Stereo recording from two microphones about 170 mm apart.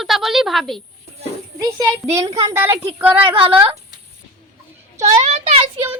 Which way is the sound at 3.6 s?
30° right (ahead or behind).